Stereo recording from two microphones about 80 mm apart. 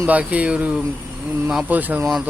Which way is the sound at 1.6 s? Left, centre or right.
Right.